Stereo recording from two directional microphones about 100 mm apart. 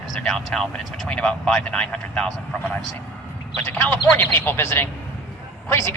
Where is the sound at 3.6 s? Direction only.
20° left (ahead or behind).